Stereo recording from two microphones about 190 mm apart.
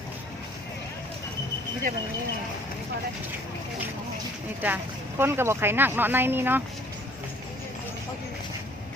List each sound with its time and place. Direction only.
4.6 s speech: 10° right (ahead or behind)